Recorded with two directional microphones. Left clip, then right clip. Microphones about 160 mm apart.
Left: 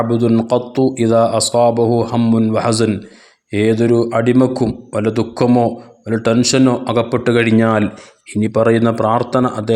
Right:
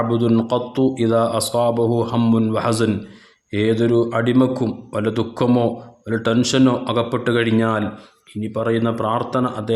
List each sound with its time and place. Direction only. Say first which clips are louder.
0.3 s a man's voice: left 4 dB; 20° left (ahead or behind)
8.4 s speech: left 8 dB; 50° left (ahead or behind); by 9.7 s 35° left (ahead or behind)